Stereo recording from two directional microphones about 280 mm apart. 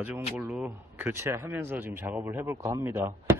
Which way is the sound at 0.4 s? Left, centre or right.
Centre.